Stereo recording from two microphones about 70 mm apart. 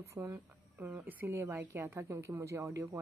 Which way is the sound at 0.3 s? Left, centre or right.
Right.